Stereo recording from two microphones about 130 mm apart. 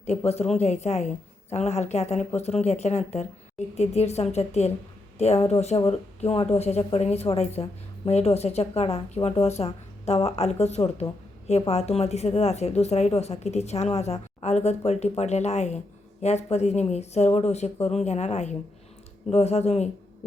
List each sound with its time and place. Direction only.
0.3 s a woman's voice: 55° left (ahead or behind)